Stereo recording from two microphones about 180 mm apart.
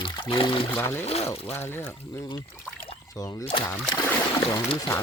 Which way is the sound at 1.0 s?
35° left (ahead or behind).